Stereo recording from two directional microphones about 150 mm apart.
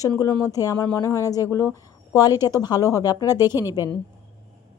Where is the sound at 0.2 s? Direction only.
20° left (ahead or behind).